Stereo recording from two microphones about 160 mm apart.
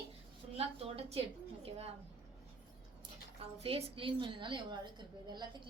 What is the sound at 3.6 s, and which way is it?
A woman's voice, 35° right (ahead or behind).